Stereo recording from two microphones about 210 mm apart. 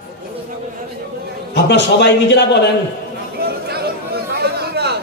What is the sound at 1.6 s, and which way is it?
Speech, 55° left (ahead or behind).